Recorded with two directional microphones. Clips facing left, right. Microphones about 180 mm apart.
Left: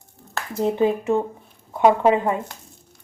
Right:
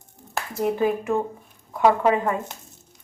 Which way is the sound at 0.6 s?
25° left (ahead or behind).